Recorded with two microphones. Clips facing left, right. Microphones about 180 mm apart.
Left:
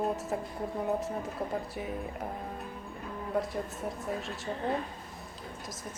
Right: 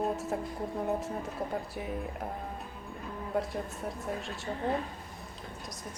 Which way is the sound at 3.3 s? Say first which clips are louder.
Left 1 dB; centre (ahead or behind).